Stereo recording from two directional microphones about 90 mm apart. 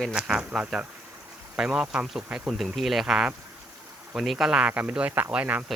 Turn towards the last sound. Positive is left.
turn(degrees=-15)  # may be behind; listen again after turning